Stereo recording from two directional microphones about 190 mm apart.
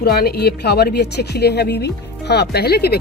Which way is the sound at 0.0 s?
55° left (ahead or behind).